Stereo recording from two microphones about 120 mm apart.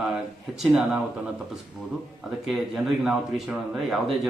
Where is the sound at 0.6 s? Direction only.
5° right (ahead or behind).